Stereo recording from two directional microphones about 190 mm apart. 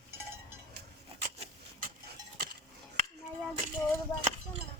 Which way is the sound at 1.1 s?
40° right (ahead or behind).